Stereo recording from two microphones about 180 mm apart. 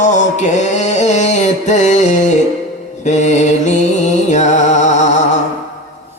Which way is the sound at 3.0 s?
40° left (ahead or behind).